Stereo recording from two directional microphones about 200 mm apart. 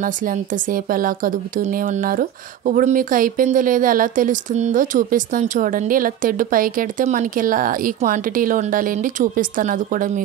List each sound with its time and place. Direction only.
0.0 s a woman's voice: 45° right (ahead or behind)